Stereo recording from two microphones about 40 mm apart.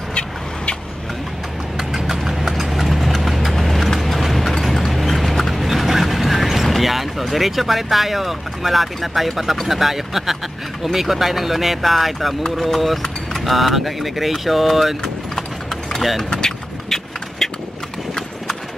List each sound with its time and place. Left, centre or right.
1.8 s clip-clop: centre
9.7 s speech: centre
15.3 s clip-clop: centre
16.0 s speech: centre
16.3 s vehicle: centre
17.4 s horse: centre